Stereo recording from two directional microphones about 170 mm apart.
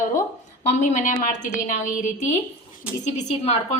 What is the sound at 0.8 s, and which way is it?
Speech, 50° left (ahead or behind).